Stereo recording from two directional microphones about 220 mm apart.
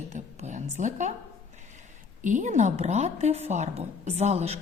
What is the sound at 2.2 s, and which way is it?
A woman's voice, 35° right (ahead or behind).